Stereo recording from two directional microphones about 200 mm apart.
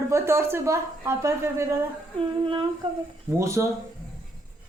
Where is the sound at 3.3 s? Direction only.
15° right (ahead or behind).